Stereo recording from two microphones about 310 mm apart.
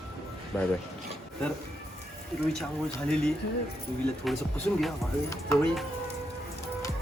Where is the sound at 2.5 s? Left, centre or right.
Centre.